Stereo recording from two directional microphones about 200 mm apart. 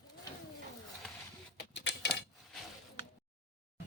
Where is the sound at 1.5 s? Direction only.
65° left (ahead or behind).